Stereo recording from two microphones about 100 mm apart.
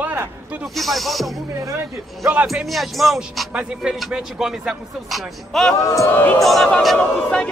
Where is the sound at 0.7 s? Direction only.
Centre (ahead or behind).